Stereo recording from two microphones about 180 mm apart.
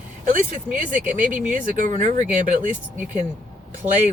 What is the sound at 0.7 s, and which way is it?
Speech, 50° right (ahead or behind).